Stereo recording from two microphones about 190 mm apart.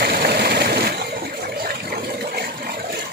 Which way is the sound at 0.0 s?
55° right (ahead or behind).